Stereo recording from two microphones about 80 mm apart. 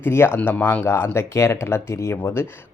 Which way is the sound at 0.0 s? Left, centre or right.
Left.